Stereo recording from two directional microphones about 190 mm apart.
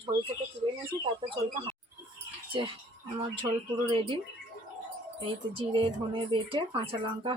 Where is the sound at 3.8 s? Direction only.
25° right (ahead or behind).